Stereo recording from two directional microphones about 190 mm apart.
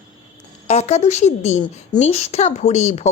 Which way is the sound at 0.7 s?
35° left (ahead or behind).